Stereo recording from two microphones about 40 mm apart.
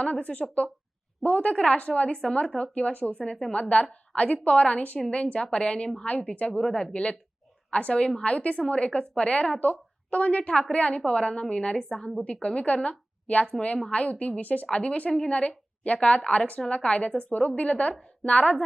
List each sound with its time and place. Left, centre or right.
0.0 s a woman's voice: left
3.2 s a woman's voice: centre
3.5 s a woman's voice: left
6.1 s a woman's voice: left
6.6 s a woman's voice: centre
14.4 s speech: left
14.7 s a woman's voice: left